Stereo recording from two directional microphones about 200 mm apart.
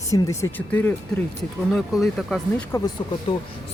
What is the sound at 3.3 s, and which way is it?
Speech, 25° left (ahead or behind).